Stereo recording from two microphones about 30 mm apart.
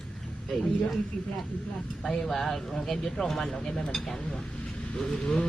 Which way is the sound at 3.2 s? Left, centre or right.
Centre.